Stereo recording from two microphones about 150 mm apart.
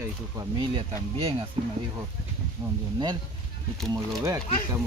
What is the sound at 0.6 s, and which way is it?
Speech, 40° right (ahead or behind).